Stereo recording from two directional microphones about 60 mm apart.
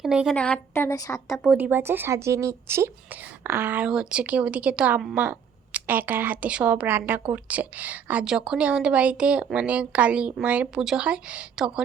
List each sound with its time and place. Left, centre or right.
0.3 s a woman's voice: centre
0.9 s speech: left
1.5 s speech: right
1.8 s speech: right
3.4 s a woman's voice: right
3.8 s a woman's voice: centre
6.8 s speech: right
8.2 s speech: centre
10.8 s speech: centre
11.0 s speech: centre